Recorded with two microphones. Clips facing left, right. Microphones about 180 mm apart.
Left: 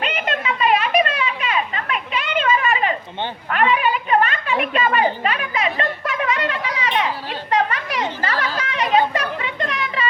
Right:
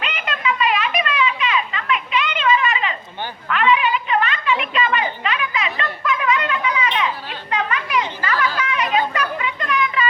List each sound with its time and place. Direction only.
0.0 s music: 45° left (ahead or behind)
0.3 s children playing: 35° left (ahead or behind)
3.5 s a sound: 45° left (ahead or behind)
7.5 s children playing: 35° left (ahead or behind)